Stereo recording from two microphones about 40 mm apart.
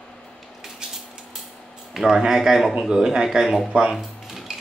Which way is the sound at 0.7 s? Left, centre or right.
Centre.